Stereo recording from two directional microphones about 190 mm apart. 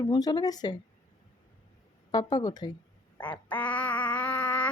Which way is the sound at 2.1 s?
20° left (ahead or behind).